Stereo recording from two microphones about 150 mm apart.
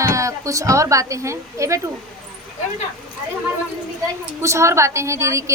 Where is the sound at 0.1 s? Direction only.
20° right (ahead or behind).